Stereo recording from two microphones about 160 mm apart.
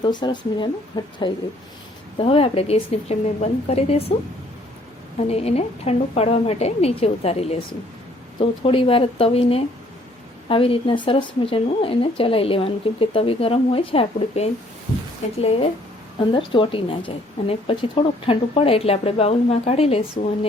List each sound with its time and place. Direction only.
0.0 s speech: 30° left (ahead or behind)
5.1 s speech: 40° left (ahead or behind)